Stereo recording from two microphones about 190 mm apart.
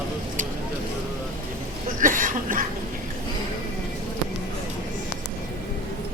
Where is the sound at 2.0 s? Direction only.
45° right (ahead or behind).